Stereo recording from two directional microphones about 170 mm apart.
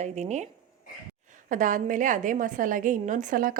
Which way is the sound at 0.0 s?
40° right (ahead or behind).